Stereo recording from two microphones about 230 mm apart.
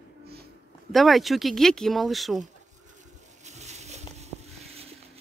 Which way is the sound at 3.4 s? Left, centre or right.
Right.